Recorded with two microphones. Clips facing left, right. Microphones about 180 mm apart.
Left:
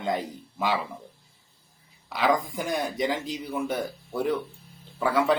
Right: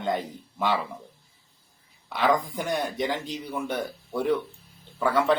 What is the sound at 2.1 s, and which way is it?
Speech, centre (ahead or behind).